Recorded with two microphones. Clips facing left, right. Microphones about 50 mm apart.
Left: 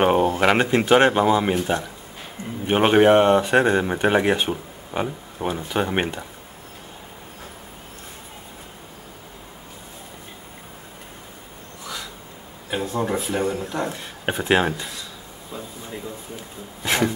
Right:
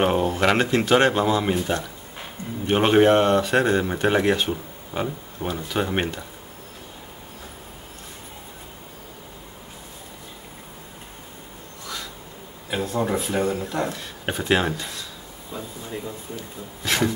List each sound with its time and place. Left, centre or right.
0.0 s speech: centre
12.6 s speech: centre
16.8 s speech: centre